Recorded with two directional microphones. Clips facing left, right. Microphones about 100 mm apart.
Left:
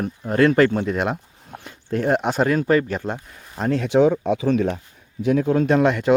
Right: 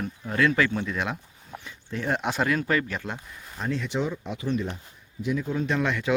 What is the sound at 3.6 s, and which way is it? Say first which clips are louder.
Speech: left 11 dB; 55° left (ahead or behind).